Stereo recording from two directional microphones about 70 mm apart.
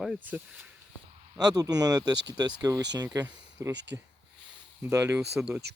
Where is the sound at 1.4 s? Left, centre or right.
Right.